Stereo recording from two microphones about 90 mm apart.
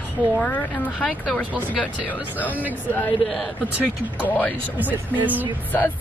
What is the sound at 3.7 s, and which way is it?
Speech, 20° right (ahead or behind).